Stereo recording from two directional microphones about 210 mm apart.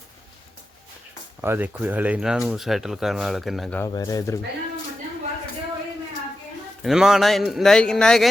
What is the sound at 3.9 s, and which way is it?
Speech, 20° left (ahead or behind).